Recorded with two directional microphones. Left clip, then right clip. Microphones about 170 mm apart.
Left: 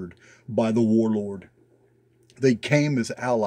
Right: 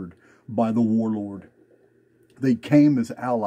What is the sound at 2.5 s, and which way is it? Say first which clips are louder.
Speech: right 3 dB; 30° left (ahead or behind).